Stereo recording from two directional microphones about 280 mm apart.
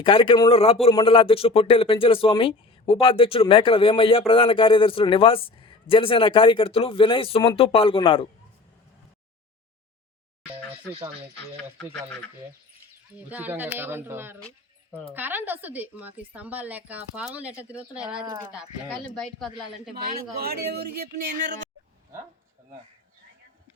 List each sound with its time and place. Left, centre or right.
0.0 s a man's voice: centre
13.1 s a woman's voice: centre
20.0 s speech: right